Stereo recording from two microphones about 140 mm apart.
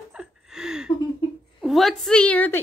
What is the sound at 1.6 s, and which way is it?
A woman's voice, centre (ahead or behind).